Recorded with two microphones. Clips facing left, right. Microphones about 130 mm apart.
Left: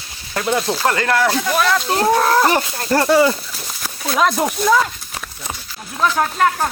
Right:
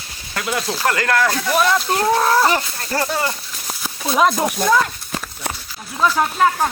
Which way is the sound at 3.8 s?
5° right (ahead or behind).